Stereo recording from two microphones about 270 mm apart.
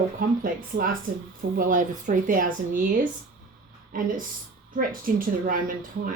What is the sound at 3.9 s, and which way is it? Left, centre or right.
Speech, right.